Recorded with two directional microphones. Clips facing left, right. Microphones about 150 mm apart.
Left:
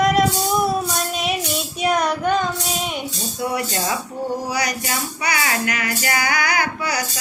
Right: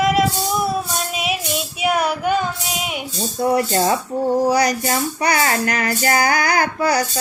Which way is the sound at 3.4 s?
40° right (ahead or behind).